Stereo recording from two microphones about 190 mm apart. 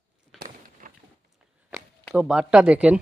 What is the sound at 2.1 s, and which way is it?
Speech, 5° right (ahead or behind).